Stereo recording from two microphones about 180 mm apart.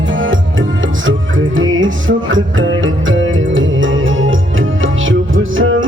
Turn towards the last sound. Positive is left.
turn(degrees=-90)